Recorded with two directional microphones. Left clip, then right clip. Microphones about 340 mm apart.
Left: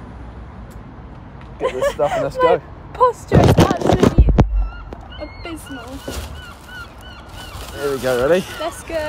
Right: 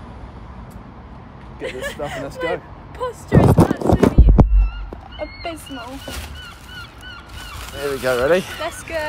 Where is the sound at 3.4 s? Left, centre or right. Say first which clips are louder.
Left 3 dB; centre.